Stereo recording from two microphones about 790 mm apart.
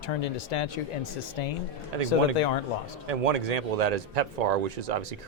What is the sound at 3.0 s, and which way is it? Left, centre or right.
Speech, right.